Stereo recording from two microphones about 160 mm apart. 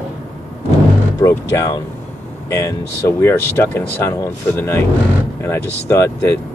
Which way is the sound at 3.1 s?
15° left (ahead or behind).